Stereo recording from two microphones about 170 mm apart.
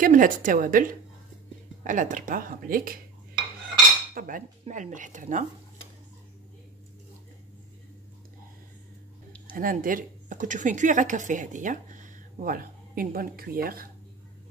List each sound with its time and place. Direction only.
0.0 s speech: 50° right (ahead or behind)
4.1 s speech: 55° right (ahead or behind)
9.6 s speech: 55° right (ahead or behind)